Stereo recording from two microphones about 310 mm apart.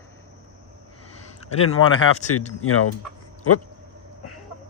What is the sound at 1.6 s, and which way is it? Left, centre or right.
Speech, left.